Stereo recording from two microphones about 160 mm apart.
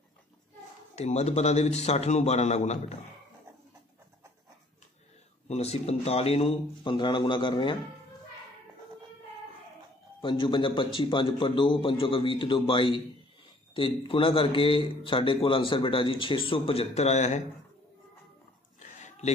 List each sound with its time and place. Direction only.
0.9 s a man's voice: 45° left (ahead or behind)
5.5 s a man's voice: 40° left (ahead or behind)
10.2 s a man's voice: 30° left (ahead or behind); by 17.4 s 45° left (ahead or behind)
18.8 s a sound: 50° left (ahead or behind)